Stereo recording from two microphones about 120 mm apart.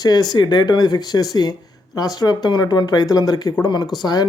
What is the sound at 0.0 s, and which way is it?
Speech, 35° left (ahead or behind).